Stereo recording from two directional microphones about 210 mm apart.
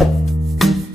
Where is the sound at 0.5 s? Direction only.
Centre (ahead or behind).